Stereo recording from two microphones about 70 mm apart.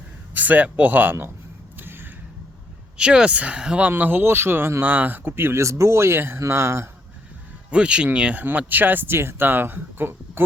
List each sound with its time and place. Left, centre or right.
0.3 s speech: right
1.8 s a sound: right
3.0 s speech: centre; by 6.8 s right
7.7 s speech: centre; by 10.4 s right